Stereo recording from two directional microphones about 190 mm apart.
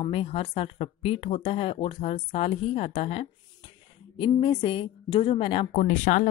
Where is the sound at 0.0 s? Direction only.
30° left (ahead or behind).